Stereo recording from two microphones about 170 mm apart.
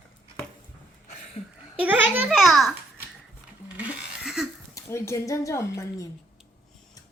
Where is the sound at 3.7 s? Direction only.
5° right (ahead or behind).